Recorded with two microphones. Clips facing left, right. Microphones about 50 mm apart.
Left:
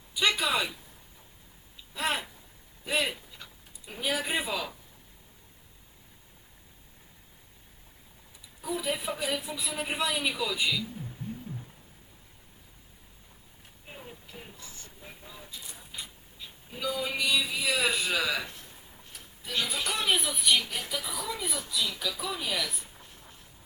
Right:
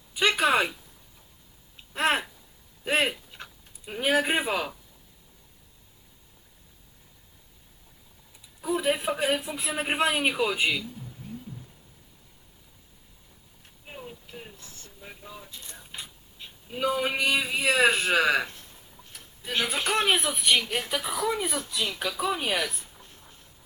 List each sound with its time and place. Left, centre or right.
0.1 s a sound: right
1.7 s a sound: right
3.8 s a man's voice: right
8.8 s a man's voice: right
16.7 s a man's voice: right
19.5 s speech: right
20.6 s a man's voice: right